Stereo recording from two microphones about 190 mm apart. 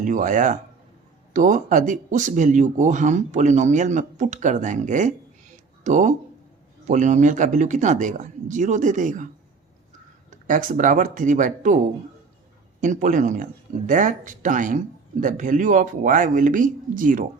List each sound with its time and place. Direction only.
0.0 s speech: 45° right (ahead or behind)
12.8 s speech: 40° right (ahead or behind)